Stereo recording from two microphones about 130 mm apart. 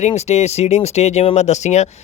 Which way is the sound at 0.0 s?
55° left (ahead or behind).